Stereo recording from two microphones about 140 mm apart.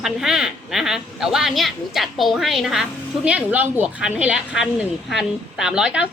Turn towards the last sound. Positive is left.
turn(degrees=-5)  # may be behind; listen again after turning